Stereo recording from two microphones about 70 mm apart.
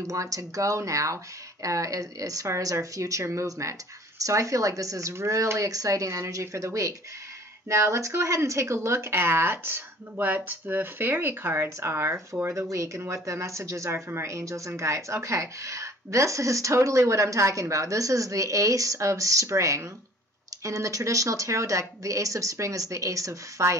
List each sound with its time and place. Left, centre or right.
0.0 s a woman's voice: right
12.5 s a woman's voice: right